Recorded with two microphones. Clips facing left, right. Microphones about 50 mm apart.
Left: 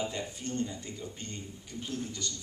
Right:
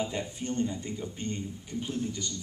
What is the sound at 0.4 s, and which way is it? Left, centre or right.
Speech, right.